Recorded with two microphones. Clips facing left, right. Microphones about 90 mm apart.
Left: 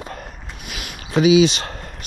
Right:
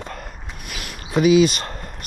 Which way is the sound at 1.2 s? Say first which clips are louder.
Left 1 dB; 50° right (ahead or behind).